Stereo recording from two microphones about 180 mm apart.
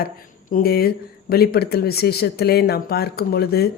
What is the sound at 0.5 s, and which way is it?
A woman's voice, 55° left (ahead or behind).